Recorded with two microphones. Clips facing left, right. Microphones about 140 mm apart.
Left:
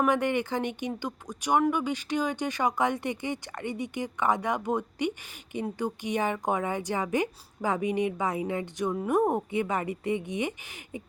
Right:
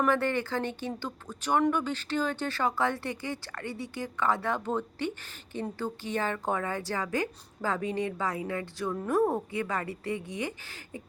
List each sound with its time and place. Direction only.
0.0 s a woman's voice: 15° left (ahead or behind)